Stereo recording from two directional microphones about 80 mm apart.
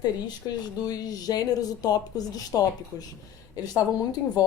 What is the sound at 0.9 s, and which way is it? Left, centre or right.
Speech, left.